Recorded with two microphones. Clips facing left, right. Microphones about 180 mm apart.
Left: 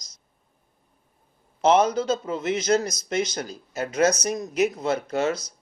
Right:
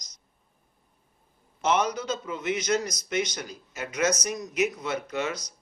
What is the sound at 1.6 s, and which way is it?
Speech, 30° left (ahead or behind).